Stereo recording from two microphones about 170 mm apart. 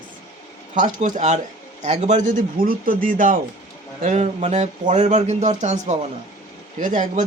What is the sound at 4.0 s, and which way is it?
A man's voice, 40° right (ahead or behind).